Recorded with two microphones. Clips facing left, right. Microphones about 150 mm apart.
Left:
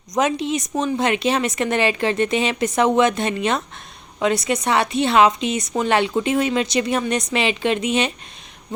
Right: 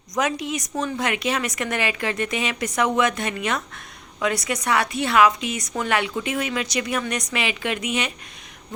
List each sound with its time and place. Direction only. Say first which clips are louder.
0.1 s a woman's voice: left 4 dB; 25° left (ahead or behind)